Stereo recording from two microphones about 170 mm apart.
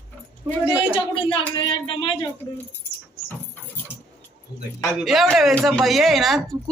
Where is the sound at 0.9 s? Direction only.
30° left (ahead or behind).